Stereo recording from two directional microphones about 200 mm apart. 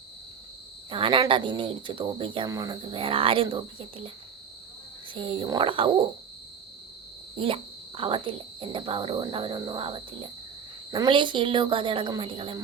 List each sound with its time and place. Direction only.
0.9 s speech: 25° right (ahead or behind)
5.1 s speech: 25° right (ahead or behind)
7.3 s speech: 25° right (ahead or behind)